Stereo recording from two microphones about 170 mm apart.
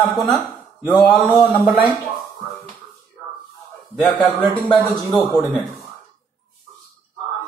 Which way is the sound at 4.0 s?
5° left (ahead or behind).